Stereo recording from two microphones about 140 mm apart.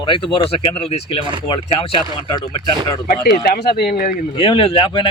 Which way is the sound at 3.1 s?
90° left.